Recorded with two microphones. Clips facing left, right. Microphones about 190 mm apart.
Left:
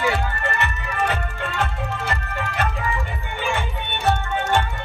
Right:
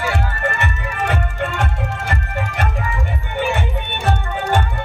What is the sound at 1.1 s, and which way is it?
Music, 50° right (ahead or behind).